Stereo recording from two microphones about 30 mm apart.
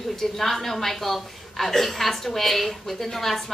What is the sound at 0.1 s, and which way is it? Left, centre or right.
A woman's voice, centre.